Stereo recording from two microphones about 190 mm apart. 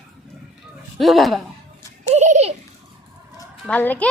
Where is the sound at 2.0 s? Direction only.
40° right (ahead or behind).